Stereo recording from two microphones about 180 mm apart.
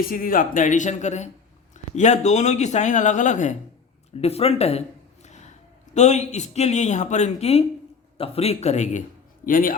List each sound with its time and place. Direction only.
0.0 s a man's voice: 50° left (ahead or behind); by 4.8 s 35° left (ahead or behind)
5.2 s a sound: 40° left (ahead or behind)
5.9 s a man's voice: 40° left (ahead or behind)